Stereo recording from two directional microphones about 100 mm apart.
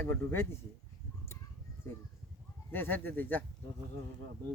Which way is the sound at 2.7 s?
20° left (ahead or behind).